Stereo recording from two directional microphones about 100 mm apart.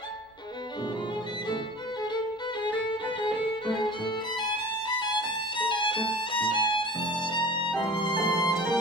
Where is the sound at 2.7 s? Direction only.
55° left (ahead or behind).